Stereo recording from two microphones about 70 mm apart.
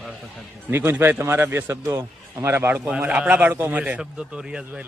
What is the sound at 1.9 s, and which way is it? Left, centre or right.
Speech, right.